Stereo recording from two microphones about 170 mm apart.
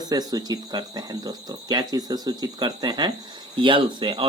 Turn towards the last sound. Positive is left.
turn(degrees=-30)  # may be behind; listen again after turning